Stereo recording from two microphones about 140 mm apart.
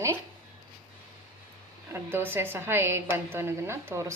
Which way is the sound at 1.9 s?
15° right (ahead or behind).